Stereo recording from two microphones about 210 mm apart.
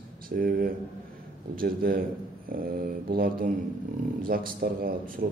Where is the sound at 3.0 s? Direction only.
45° right (ahead or behind).